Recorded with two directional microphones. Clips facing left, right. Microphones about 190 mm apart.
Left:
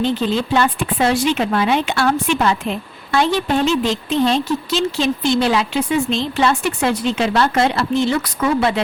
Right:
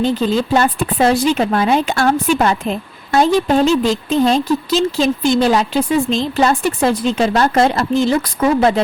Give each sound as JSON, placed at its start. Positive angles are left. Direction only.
{"t": 0.0, "sound": "speech", "side_deg": -40}